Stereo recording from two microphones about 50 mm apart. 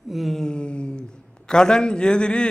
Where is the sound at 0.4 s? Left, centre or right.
Centre.